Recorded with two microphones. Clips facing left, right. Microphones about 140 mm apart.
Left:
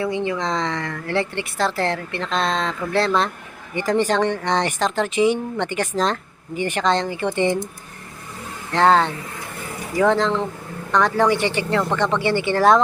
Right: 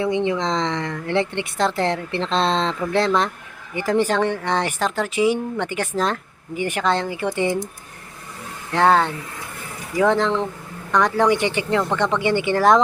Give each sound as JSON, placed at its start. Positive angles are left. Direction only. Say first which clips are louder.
{"t": 0.0, "sound": "speech", "louder": "right 2 dB", "side_deg": -20}
{"t": 3.8, "sound": "speech", "louder": "even", "side_deg": -10}
{"t": 8.7, "sound": "speech", "louder": "left 1 dB", "side_deg": -10}